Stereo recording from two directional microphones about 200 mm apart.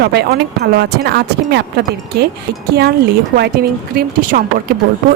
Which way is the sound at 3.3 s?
50° right (ahead or behind).